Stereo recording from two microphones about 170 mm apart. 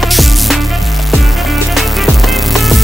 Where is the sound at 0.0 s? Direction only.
Centre (ahead or behind).